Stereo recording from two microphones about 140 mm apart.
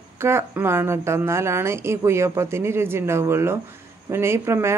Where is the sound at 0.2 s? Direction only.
20° right (ahead or behind).